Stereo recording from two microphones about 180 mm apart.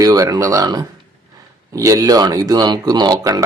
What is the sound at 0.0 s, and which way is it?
Speech, 20° right (ahead or behind).